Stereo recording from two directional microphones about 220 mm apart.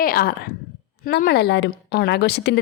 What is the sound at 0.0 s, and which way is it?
A woman's voice, 40° left (ahead or behind).